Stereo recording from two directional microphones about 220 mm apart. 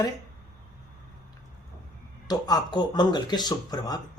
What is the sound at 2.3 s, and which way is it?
Speech, 15° left (ahead or behind).